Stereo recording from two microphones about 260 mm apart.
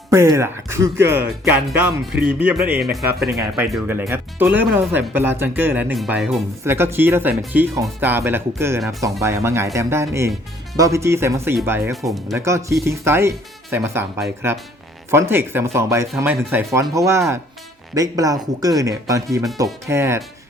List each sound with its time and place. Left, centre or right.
0.1 s speech: centre